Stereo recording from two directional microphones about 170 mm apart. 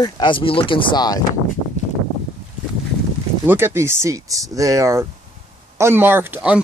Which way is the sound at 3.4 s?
15° right (ahead or behind).